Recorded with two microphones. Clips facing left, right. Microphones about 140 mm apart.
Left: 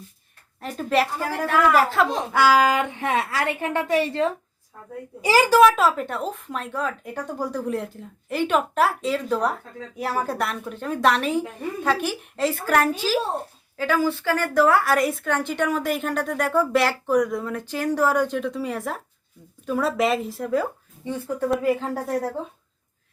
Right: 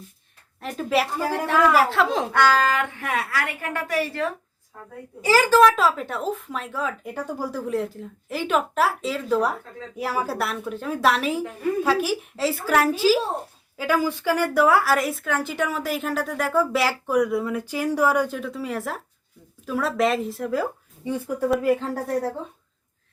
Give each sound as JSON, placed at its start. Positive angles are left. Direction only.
{"t": 0.6, "sound": "a woman's voice", "side_deg": 0}